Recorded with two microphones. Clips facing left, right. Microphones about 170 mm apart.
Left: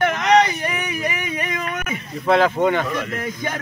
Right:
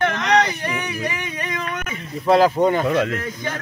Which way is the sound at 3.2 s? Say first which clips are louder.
Left 1 dB; 10° left (ahead or behind).